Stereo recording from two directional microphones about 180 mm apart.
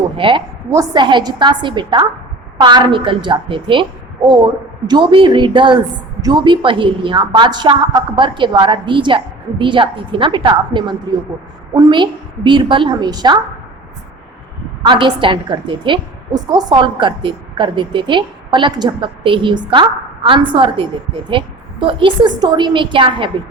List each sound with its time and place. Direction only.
0.2 s a woman's voice: 25° right (ahead or behind)
14.8 s a woman's voice: 25° right (ahead or behind)